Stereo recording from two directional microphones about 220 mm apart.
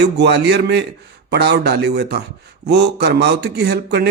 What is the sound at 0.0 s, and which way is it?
Speech, 50° right (ahead or behind).